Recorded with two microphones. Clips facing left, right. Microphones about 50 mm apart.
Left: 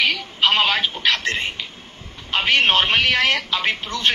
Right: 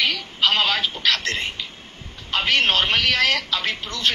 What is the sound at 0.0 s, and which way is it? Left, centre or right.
A woman's voice, left.